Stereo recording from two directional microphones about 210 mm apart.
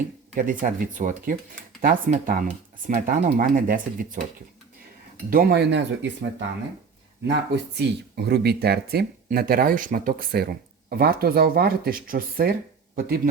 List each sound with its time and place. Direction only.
0.3 s speech: 40° right (ahead or behind)
5.3 s speech: 45° right (ahead or behind)
7.3 s speech: 55° right (ahead or behind)